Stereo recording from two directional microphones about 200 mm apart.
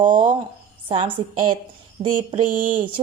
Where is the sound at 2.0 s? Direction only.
40° right (ahead or behind).